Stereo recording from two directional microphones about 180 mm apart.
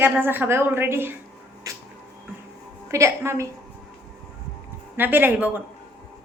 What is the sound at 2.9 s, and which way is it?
Speech, 15° right (ahead or behind).